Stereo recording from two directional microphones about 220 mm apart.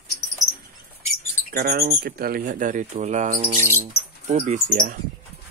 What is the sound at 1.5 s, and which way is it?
Speech, 45° right (ahead or behind).